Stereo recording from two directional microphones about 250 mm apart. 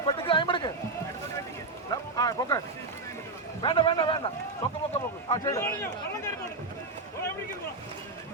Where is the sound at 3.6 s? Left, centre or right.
Centre.